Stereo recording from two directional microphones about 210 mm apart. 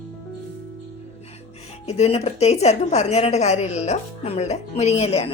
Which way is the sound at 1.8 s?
30° left (ahead or behind).